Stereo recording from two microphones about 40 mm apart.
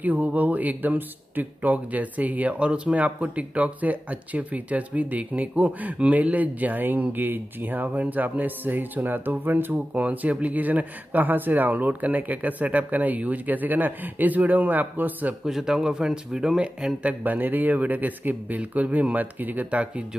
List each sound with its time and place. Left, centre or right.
0.0 s speech: right
15.4 s speech: centre
17.2 s speech: right